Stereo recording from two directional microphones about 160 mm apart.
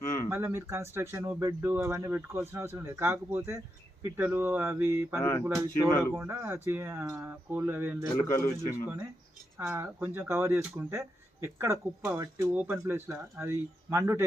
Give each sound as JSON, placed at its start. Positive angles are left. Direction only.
{"t": 0.0, "sound": "a sound", "side_deg": 20}
{"t": 0.3, "sound": "speech", "side_deg": -15}
{"t": 8.1, "sound": "a man's voice", "side_deg": 20}
{"t": 9.6, "sound": "speech", "side_deg": -15}